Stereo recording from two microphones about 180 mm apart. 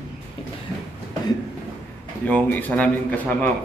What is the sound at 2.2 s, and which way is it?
A man's voice, 10° left (ahead or behind).